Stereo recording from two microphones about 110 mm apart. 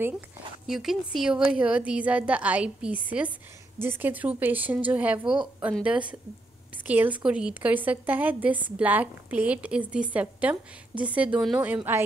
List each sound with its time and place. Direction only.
0.7 s a woman's voice: centre (ahead or behind)